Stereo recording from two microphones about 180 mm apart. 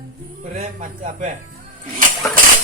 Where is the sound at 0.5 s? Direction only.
50° right (ahead or behind).